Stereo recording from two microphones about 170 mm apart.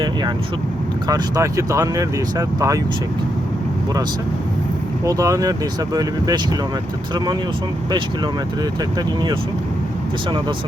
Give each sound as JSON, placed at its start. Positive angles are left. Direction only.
{"t": 1.0, "sound": "speech", "side_deg": -20}
{"t": 5.0, "sound": "speech", "side_deg": -20}
{"t": 9.0, "sound": "speech", "side_deg": -25}